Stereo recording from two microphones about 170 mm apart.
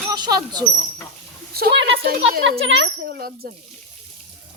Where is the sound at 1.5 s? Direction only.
65° right (ahead or behind).